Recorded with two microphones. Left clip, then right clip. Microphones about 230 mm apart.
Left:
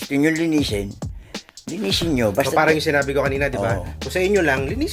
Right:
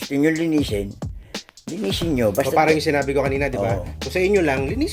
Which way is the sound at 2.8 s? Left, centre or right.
Centre.